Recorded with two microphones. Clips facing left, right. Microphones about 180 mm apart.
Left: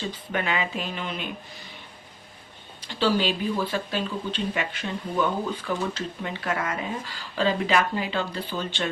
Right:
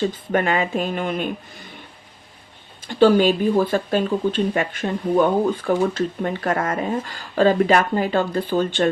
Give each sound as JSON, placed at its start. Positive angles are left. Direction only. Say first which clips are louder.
{"t": 0.0, "sound": "speech", "louder": "right 9 dB", "side_deg": -45}
{"t": 2.8, "sound": "speech", "louder": "right 9 dB", "side_deg": -50}